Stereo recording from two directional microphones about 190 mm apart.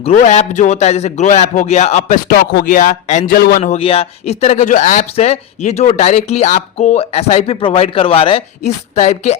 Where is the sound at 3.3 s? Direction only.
55° left (ahead or behind).